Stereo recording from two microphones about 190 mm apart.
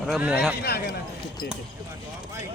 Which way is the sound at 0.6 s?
55° left (ahead or behind).